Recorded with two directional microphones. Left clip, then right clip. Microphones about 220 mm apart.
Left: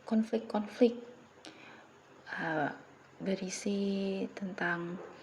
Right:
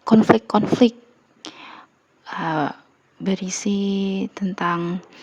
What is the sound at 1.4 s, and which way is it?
Tick-tock, 40° right (ahead or behind).